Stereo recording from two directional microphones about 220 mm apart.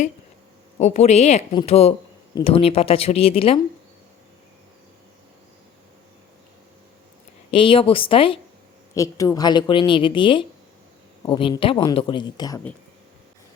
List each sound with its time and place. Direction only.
0.8 s a woman's voice: 30° left (ahead or behind)
7.5 s a woman's voice: 25° left (ahead or behind)